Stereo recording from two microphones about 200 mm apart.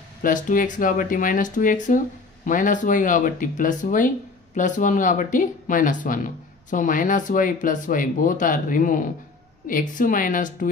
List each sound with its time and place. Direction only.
0.2 s speech: 40° left (ahead or behind)